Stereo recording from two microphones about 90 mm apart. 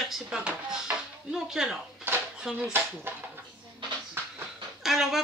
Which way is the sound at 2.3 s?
10° right (ahead or behind).